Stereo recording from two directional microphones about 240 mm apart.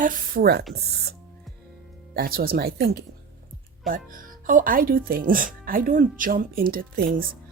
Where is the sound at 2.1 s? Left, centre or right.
Right.